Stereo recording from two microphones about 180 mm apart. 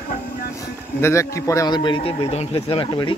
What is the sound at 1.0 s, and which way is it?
A man's voice, 15° left (ahead or behind).